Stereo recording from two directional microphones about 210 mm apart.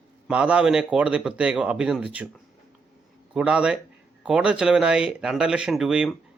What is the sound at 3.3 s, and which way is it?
Speech, 5° right (ahead or behind).